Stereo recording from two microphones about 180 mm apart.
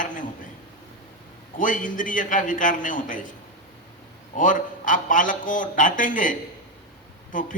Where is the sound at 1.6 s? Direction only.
45° left (ahead or behind).